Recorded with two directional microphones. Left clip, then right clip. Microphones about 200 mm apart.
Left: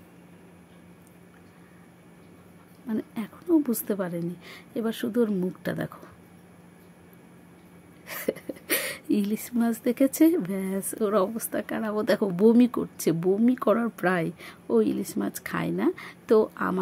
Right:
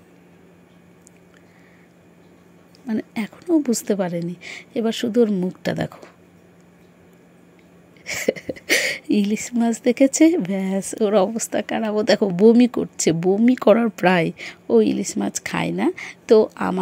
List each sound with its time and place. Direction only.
2.9 s speech: 15° right (ahead or behind)
8.0 s speech: 20° right (ahead or behind)